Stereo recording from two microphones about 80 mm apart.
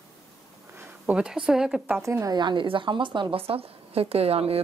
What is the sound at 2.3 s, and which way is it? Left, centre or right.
Speech, right.